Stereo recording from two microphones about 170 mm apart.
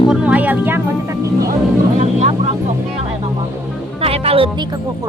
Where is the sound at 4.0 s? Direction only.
35° right (ahead or behind).